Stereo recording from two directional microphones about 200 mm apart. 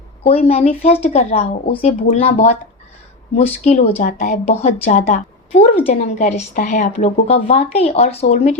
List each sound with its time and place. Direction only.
0.2 s a woman's voice: 30° left (ahead or behind)